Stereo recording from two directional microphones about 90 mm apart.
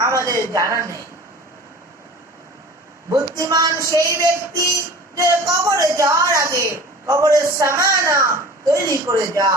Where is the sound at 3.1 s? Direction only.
35° right (ahead or behind).